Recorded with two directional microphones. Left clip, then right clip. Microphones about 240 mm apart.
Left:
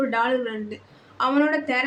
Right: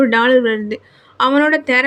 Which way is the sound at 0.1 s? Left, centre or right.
Right.